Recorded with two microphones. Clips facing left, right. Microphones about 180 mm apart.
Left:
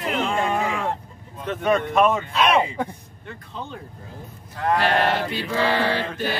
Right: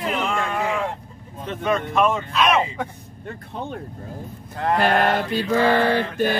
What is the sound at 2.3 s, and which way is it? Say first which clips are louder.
Speech: even; 30° left (ahead or behind).